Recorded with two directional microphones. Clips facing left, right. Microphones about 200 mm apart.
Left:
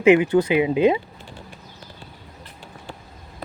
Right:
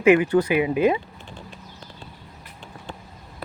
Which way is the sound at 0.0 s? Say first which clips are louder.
Left 1 dB; 20° left (ahead or behind).